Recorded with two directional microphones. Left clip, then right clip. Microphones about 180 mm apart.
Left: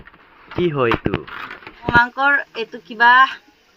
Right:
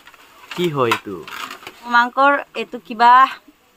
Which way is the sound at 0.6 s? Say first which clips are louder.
Even; 10° right (ahead or behind).